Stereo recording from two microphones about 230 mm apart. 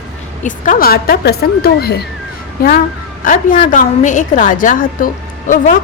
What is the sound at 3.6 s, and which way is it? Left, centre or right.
Speech, left.